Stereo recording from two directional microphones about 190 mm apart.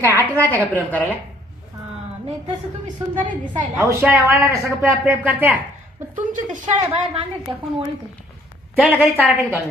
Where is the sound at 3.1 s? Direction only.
45° right (ahead or behind).